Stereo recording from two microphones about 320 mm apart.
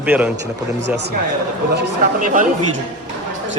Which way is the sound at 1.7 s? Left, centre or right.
Right.